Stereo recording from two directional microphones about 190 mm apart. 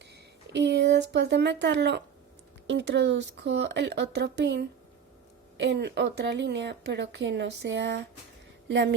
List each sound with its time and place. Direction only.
0.5 s a woman's voice: 65° right (ahead or behind)